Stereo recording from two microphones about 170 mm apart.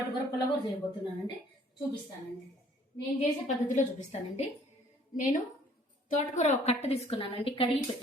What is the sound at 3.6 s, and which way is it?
Speech, 45° left (ahead or behind).